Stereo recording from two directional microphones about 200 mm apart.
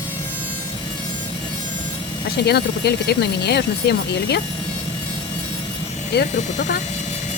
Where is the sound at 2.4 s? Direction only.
55° left (ahead or behind).